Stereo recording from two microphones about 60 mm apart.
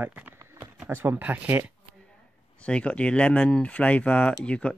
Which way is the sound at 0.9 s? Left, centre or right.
Right.